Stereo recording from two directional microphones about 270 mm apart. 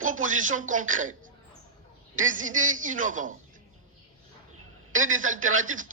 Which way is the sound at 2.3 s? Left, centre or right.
Right.